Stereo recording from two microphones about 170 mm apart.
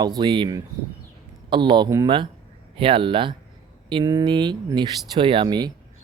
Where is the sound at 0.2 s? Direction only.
25° right (ahead or behind).